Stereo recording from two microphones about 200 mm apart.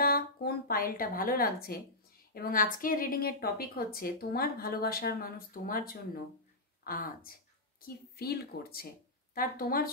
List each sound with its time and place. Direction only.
0.0 s a woman's voice: 50° left (ahead or behind)